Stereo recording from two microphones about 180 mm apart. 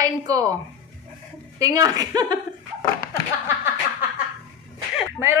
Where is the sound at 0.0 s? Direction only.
20° right (ahead or behind).